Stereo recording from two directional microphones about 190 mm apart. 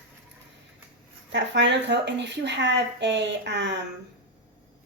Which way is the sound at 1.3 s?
70° right (ahead or behind).